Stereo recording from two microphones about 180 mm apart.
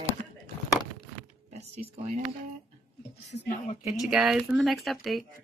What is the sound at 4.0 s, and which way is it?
Speech, centre (ahead or behind).